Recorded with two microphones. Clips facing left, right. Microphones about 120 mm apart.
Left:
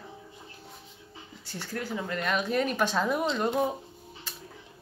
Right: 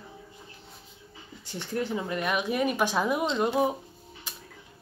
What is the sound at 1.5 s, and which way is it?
Speech, 20° right (ahead or behind).